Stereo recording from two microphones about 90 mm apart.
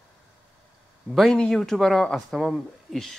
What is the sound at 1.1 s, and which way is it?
Speech, 5° left (ahead or behind).